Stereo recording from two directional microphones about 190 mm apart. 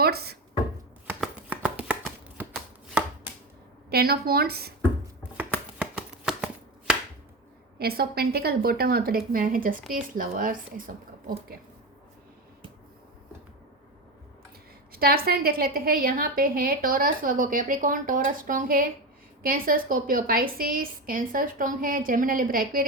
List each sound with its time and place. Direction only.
0.0 s a sound: 55° right (ahead or behind)
1.2 s shuffling cards: 5° right (ahead or behind)
3.8 s a woman's voice: 55° right (ahead or behind)
5.4 s finger snapping: 5° right (ahead or behind)
7.8 s a woman's voice: 55° right (ahead or behind)
14.9 s a woman's voice: 50° right (ahead or behind)